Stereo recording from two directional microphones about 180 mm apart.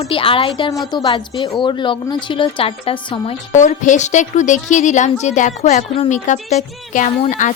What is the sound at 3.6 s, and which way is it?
A woman's voice, 45° left (ahead or behind).